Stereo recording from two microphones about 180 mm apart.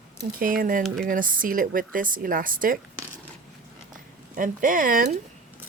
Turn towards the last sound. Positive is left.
turn(degrees=-50)  # may be behind; listen again after turning